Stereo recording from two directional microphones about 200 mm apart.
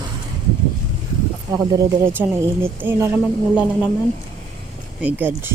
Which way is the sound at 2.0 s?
10° right (ahead or behind).